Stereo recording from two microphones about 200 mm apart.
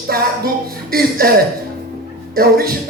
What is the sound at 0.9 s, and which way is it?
A man's voice, 50° right (ahead or behind).